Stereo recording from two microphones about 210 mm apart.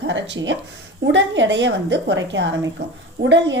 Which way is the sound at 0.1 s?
60° right (ahead or behind).